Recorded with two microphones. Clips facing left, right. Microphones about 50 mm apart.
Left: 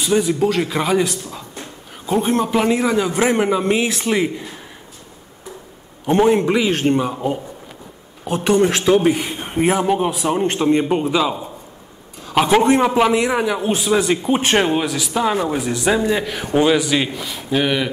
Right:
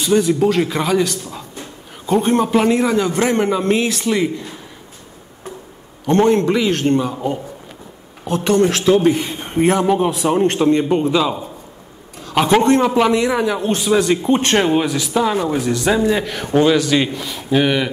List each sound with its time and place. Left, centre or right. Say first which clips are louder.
0.0 s a man's voice: right 2 dB; centre
3.9 s speech: right 1 dB; left
6.0 s a man's voice: right 1 dB; centre
8.3 s a man's voice: right 1 dB; centre
10.7 s a man's voice: right 1 dB; centre
12.7 s a man's voice: right 1 dB; centre